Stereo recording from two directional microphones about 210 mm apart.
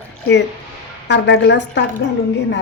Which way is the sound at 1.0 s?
55° left (ahead or behind).